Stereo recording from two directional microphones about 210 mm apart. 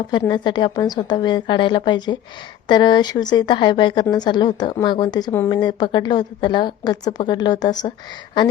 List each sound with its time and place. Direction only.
0.1 s a woman's voice: 20° left (ahead or behind)